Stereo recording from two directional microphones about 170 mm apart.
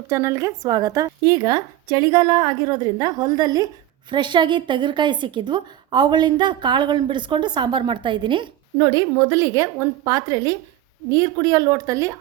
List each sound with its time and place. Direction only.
0.1 s speech: 15° right (ahead or behind)